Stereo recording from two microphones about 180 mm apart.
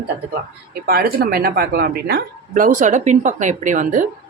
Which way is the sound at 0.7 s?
60° right (ahead or behind).